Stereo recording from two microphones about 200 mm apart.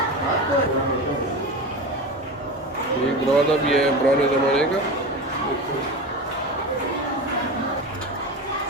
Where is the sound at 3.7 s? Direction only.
5° left (ahead or behind).